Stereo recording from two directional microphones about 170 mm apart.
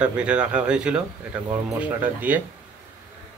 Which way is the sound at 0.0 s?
5° right (ahead or behind).